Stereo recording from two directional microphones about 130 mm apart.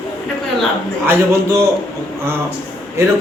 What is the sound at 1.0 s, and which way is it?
Speech, 20° right (ahead or behind).